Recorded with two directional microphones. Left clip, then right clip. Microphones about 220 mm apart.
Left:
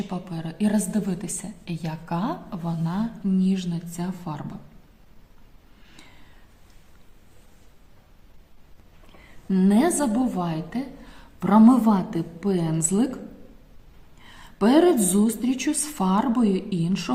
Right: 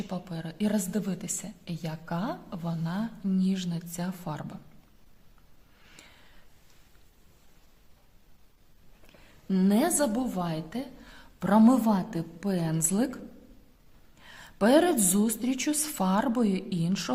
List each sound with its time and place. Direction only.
0.1 s a woman's voice: 40° right (ahead or behind)
5.9 s a sound: 45° right (ahead or behind)
9.5 s a woman's voice: 40° right (ahead or behind)
14.2 s a woman's voice: 45° right (ahead or behind)